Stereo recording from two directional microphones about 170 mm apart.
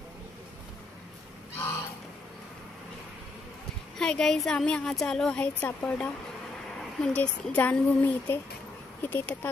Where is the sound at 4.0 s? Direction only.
5° left (ahead or behind).